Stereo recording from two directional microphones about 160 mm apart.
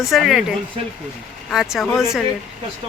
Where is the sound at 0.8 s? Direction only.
35° right (ahead or behind).